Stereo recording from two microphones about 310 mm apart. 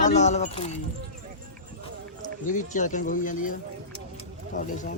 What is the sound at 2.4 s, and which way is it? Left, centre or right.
Speech, left.